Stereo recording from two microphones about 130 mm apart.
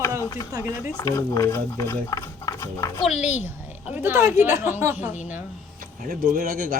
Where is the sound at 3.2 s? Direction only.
60° left (ahead or behind).